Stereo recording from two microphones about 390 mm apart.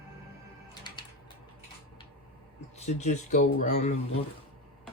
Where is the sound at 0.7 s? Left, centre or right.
Centre.